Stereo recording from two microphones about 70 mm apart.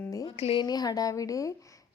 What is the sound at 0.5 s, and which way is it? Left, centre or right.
Speech, left.